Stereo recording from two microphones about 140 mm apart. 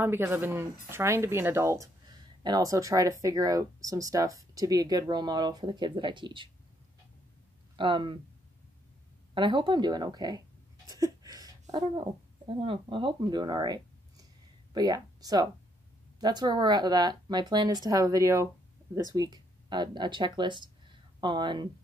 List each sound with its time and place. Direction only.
0.0 s speech: 15° right (ahead or behind); by 6.5 s 35° right (ahead or behind)
7.7 s speech: 35° right (ahead or behind)
9.3 s speech: 35° right (ahead or behind)
10.9 s a sound: 25° right (ahead or behind)
11.7 s speech: 40° right (ahead or behind)